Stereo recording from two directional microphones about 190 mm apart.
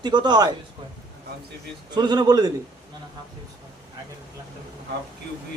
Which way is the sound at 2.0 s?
20° right (ahead or behind).